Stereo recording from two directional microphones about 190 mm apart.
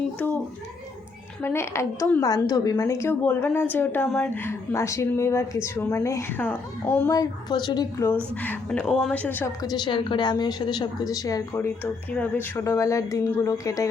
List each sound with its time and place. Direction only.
0.2 s a woman's voice: 10° left (ahead or behind)
7.1 s a woman's voice: 20° left (ahead or behind)
9.6 s a woman's voice: 25° left (ahead or behind)